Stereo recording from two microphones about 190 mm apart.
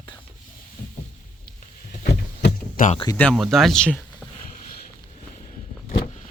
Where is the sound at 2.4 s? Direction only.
55° left (ahead or behind).